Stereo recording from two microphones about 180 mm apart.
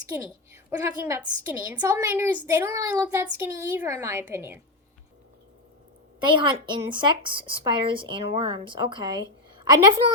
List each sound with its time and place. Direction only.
1.0 s a woman's voice: 15° right (ahead or behind)
6.2 s speech: 25° right (ahead or behind)